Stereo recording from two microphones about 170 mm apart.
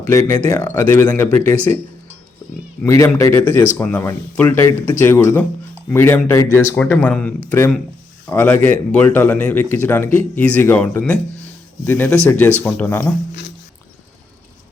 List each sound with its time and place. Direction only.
0.1 s a man's voice: 15° left (ahead or behind)
2.8 s a man's voice: 20° left (ahead or behind)